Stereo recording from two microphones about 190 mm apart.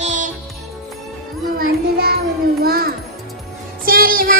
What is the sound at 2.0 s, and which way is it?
Music, 55° right (ahead or behind).